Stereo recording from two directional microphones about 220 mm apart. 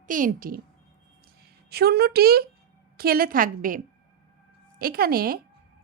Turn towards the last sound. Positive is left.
turn(degrees=-40)  # may be behind; listen again after turning